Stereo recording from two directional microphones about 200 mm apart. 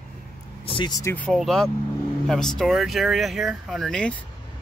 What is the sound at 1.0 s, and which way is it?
Speech, 5° left (ahead or behind).